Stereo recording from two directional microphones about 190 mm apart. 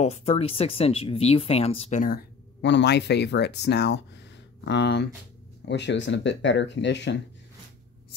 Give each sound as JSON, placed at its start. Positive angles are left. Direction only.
{"t": 0.0, "sound": "speech", "side_deg": 35}